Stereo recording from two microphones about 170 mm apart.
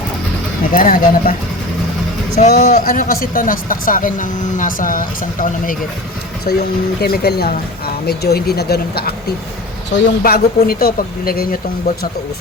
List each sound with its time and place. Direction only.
0.6 s speech: 55° left (ahead or behind)
2.5 s speech: 60° left (ahead or behind)